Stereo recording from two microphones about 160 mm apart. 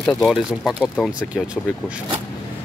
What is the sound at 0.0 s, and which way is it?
Speech, 5° left (ahead or behind).